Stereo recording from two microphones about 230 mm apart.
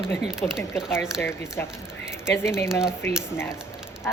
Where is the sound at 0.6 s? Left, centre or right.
Centre.